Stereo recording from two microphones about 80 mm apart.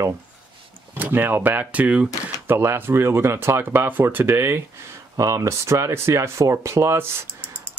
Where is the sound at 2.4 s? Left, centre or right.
Right.